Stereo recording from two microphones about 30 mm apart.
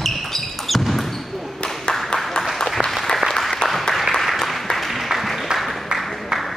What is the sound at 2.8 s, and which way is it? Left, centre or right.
Applause, right.